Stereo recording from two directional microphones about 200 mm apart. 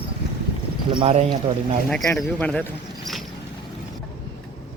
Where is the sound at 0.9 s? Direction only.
30° right (ahead or behind).